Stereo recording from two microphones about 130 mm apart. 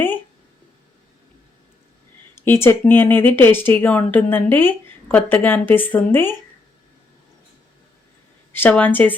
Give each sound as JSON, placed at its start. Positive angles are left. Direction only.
{"t": 2.3, "sound": "speech", "side_deg": 20}
{"t": 8.5, "sound": "speech", "side_deg": 15}